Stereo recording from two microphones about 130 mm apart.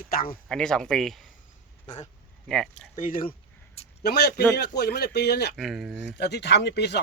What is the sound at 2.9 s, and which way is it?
Speech, 85° left.